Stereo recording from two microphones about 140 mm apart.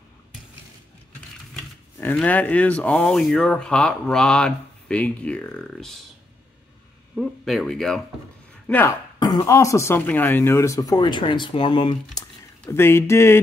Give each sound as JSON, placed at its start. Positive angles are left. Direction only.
{"t": 2.0, "sound": "speech", "side_deg": 10}
{"t": 7.2, "sound": "speech", "side_deg": 0}
{"t": 9.2, "sound": "speech", "side_deg": 25}
{"t": 12.2, "sound": "speech", "side_deg": 20}